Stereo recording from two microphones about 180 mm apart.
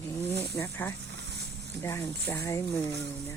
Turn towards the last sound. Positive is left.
turn(degrees=15)  # may be behind; listen again after turning